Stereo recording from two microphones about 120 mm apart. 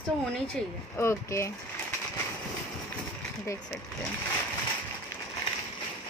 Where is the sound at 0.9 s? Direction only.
25° left (ahead or behind).